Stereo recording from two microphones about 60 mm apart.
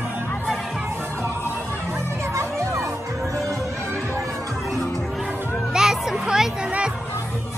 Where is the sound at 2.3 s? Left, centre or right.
Right.